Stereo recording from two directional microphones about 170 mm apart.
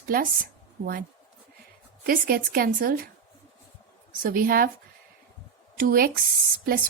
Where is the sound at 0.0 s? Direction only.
60° right (ahead or behind).